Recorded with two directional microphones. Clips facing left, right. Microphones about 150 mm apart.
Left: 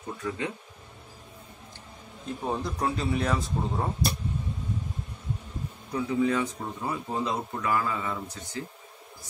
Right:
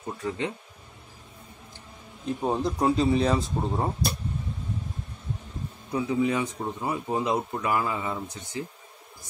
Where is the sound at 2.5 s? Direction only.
15° right (ahead or behind).